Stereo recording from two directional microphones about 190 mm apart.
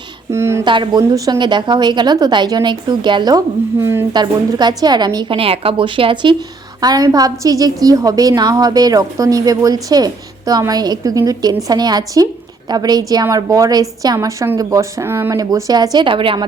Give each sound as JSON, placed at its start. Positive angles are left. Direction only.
{"t": 0.3, "sound": "speech", "side_deg": -15}
{"t": 0.6, "sound": "a woman's voice", "side_deg": -25}